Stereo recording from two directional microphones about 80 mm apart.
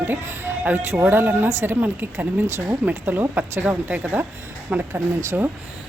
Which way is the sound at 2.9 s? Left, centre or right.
Right.